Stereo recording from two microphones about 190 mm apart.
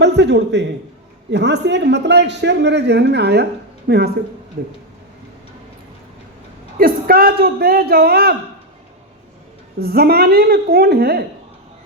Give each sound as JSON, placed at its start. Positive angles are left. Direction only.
{"t": 0.0, "sound": "a man's voice", "side_deg": -65}
{"t": 6.7, "sound": "speech", "side_deg": -50}
{"t": 9.7, "sound": "a man's voice", "side_deg": -55}